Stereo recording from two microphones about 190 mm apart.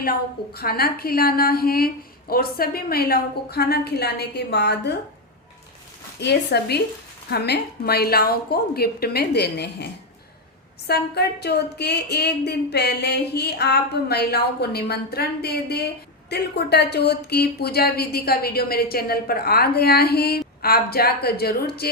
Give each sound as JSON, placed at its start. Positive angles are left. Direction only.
{"t": 0.0, "sound": "a woman's voice", "side_deg": 50}
{"t": 6.1, "sound": "speech", "side_deg": 60}